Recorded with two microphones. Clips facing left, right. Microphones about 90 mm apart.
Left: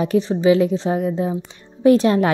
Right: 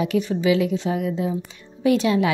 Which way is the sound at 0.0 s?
35° left (ahead or behind).